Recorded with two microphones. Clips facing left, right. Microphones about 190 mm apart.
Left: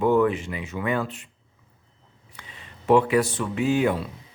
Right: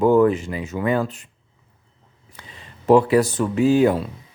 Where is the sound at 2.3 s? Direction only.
35° right (ahead or behind).